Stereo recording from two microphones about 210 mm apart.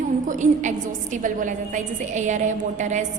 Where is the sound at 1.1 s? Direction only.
35° right (ahead or behind).